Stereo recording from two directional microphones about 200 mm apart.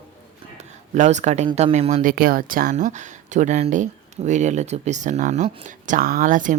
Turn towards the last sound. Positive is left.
turn(degrees=-40)  # may be behind; listen again after turning